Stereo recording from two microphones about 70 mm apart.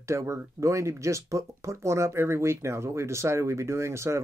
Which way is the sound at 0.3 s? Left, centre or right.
Right.